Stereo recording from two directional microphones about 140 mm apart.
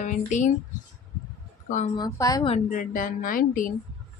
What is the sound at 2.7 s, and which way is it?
Speech, 70° left (ahead or behind).